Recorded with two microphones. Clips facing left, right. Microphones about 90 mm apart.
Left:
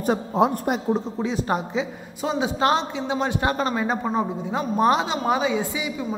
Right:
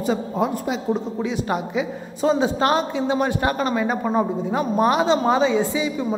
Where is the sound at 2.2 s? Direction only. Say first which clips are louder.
Right 3 dB; 20° left (ahead or behind).